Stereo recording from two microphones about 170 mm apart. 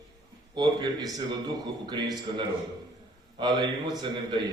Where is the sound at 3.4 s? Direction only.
25° right (ahead or behind).